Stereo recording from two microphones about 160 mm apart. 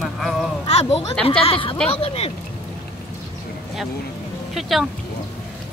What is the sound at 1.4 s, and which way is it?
Speech, 35° left (ahead or behind).